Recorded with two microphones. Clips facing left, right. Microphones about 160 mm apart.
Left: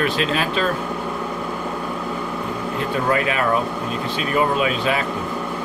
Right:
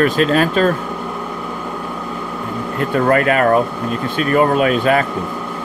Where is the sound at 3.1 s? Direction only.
50° right (ahead or behind).